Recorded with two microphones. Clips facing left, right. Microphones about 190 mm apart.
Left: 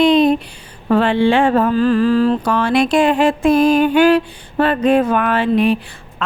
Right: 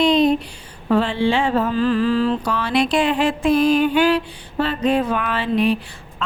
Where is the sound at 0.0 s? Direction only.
55° left (ahead or behind).